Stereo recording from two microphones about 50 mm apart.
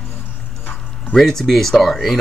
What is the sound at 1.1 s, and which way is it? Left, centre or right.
Speech, centre.